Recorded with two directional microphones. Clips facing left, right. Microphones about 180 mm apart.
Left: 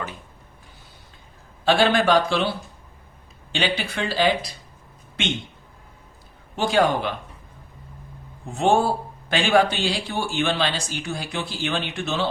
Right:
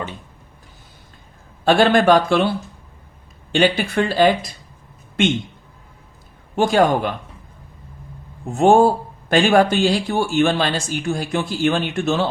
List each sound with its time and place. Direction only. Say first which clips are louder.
1.6 s speech: right 5 dB; 50° right (ahead or behind)
3.5 s speech: right 8 dB; 50° right (ahead or behind)
6.6 s speech: right 4 dB; 45° right (ahead or behind)
8.5 s speech: right 7 dB; 45° right (ahead or behind)